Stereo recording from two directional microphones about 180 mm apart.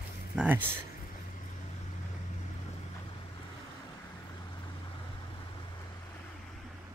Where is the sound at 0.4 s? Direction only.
10° right (ahead or behind).